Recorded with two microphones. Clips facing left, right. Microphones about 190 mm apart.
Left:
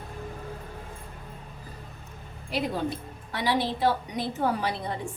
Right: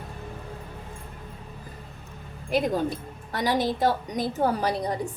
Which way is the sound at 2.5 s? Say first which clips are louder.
Right 4 dB; 45° right (ahead or behind).